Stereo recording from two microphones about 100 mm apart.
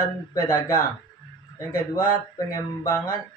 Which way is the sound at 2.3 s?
35° left (ahead or behind).